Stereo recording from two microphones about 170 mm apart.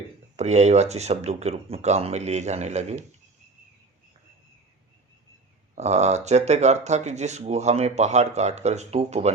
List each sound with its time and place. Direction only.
0.3 s speech: 40° right (ahead or behind)
5.7 s speech: 40° right (ahead or behind)